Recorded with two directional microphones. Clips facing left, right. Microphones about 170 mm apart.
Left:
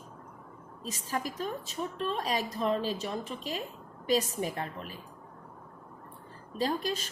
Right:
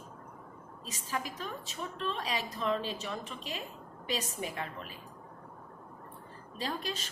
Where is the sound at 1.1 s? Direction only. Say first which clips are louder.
Left 4 dB; 40° left (ahead or behind).